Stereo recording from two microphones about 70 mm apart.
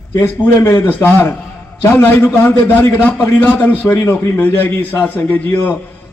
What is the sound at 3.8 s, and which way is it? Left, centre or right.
Speech, left.